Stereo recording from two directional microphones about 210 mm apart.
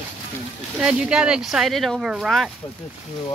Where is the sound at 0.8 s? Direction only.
5° right (ahead or behind).